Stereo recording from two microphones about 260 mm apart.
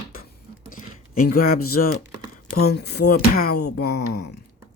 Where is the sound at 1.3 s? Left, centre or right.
Left.